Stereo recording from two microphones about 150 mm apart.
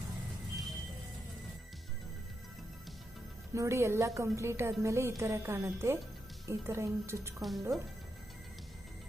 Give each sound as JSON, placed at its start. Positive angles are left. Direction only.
{"t": 3.5, "sound": "a woman's voice", "side_deg": -20}